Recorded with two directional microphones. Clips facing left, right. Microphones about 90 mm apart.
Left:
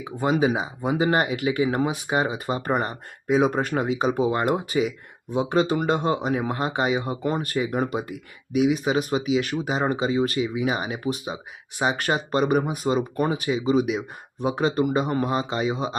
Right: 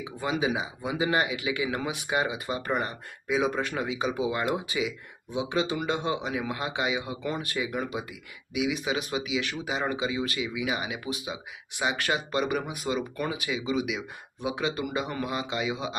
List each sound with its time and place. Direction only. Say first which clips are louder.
0.0 s speech: left 7 dB; 45° left (ahead or behind)